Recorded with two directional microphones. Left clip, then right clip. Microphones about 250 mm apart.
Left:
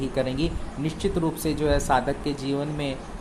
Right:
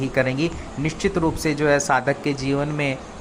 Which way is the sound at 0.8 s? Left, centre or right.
Centre.